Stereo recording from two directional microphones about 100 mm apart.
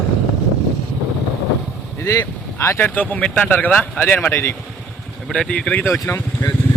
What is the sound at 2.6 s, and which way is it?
Speech, 30° left (ahead or behind).